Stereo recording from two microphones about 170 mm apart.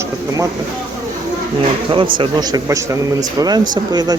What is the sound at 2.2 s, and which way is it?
A man's voice, 25° right (ahead or behind).